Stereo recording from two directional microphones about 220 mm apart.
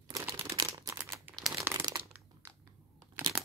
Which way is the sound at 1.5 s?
15° right (ahead or behind).